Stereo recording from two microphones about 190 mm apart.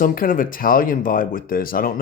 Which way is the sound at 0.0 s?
45° left (ahead or behind).